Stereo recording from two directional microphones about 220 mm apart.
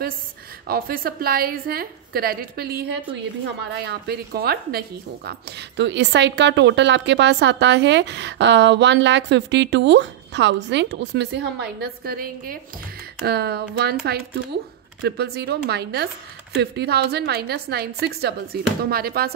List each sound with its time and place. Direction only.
0.7 s a woman's voice: 40° right (ahead or behind)
15.0 s a woman's voice: 45° right (ahead or behind)